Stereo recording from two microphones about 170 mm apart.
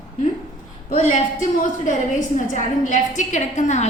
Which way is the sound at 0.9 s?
50° left (ahead or behind).